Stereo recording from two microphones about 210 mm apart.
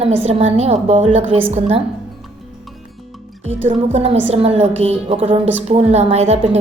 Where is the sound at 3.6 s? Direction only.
30° right (ahead or behind).